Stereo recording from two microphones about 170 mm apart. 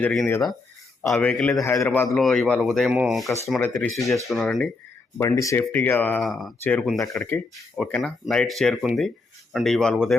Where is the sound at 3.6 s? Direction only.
15° left (ahead or behind).